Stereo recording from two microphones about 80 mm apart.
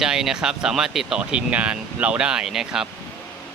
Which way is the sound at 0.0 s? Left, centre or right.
Centre.